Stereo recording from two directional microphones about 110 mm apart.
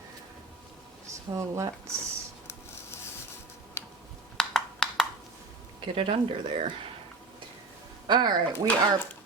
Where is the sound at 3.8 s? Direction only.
25° left (ahead or behind).